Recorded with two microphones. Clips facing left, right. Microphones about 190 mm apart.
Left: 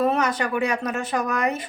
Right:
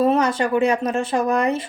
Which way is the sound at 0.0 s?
25° right (ahead or behind).